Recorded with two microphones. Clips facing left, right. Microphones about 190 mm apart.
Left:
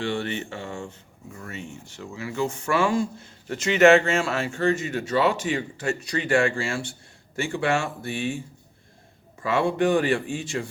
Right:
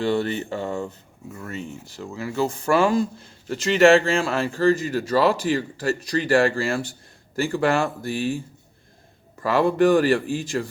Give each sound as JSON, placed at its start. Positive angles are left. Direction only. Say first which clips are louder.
{"t": 0.0, "sound": "speech", "louder": "right 5 dB", "side_deg": -40}
{"t": 9.4, "sound": "speech", "louder": "right 4 dB", "side_deg": -40}